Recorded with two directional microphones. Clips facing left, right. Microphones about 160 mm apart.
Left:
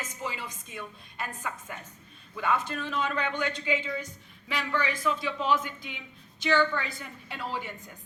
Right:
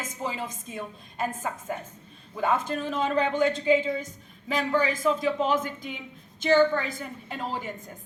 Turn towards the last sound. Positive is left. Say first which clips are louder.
# right 3 dB
turn(degrees=-45)  # may be behind; listen again after turning